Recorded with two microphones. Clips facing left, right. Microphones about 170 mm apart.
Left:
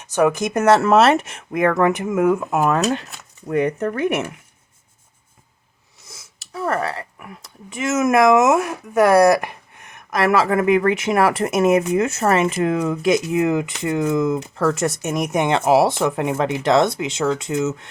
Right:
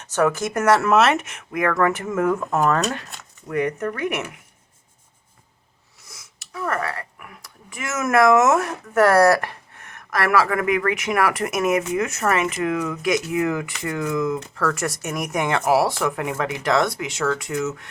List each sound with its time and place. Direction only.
0.0 s speech: 15° left (ahead or behind)
3.5 s speech: 25° left (ahead or behind)
6.1 s speech: 25° left (ahead or behind)